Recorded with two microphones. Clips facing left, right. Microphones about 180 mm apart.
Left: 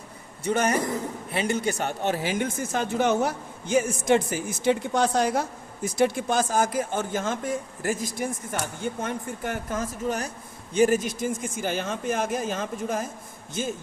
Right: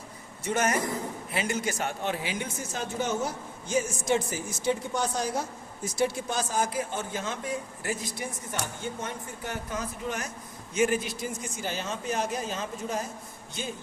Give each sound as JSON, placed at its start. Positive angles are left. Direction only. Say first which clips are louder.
{"t": 0.4, "sound": "a man's voice", "louder": "left 3 dB", "side_deg": 30}
{"t": 1.8, "sound": "speech", "louder": "left 4 dB", "side_deg": 45}